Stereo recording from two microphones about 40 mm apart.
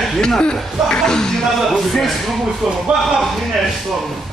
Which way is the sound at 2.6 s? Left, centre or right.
Centre.